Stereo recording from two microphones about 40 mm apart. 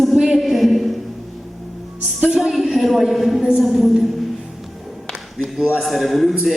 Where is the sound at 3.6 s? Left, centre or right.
Centre.